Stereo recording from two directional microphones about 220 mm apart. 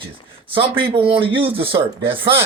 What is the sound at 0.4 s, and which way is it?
A man's voice, 25° right (ahead or behind).